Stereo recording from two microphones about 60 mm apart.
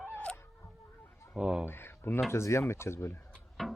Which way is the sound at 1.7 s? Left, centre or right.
Left.